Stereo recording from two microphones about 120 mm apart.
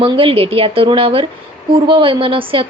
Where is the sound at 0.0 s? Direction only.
50° right (ahead or behind).